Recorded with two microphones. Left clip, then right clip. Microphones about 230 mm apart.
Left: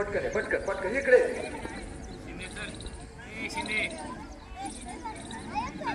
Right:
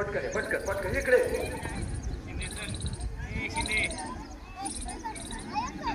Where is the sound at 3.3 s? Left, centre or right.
Left.